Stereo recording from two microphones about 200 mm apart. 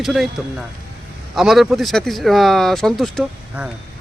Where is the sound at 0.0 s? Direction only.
Centre (ahead or behind).